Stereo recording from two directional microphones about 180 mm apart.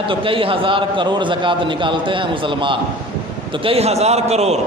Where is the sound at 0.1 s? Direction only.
30° right (ahead or behind).